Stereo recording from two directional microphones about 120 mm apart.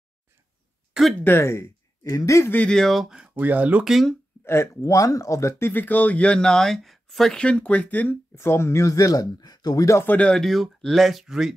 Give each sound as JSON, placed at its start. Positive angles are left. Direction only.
{"t": 1.2, "sound": "speech", "side_deg": 20}
{"t": 2.5, "sound": "speech", "side_deg": 10}
{"t": 3.9, "sound": "speech", "side_deg": 5}
{"t": 4.5, "sound": "speech", "side_deg": 25}
{"t": 10.1, "sound": "speech", "side_deg": 5}